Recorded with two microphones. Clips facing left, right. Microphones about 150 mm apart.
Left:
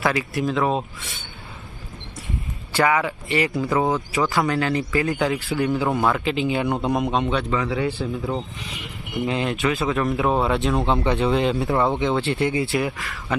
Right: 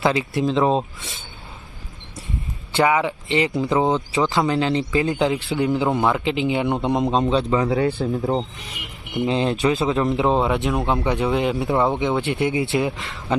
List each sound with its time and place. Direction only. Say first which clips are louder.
0.0 s speech: right 2 dB; 25° right (ahead or behind)
2.7 s speech: right 2 dB; 20° right (ahead or behind); by 8.1 s 40° right (ahead or behind)
8.2 s speech: right 4 dB; 25° right (ahead or behind)